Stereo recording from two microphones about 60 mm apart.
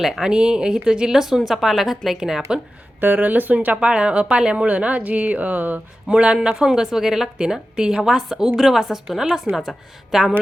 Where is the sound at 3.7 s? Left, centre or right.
Centre.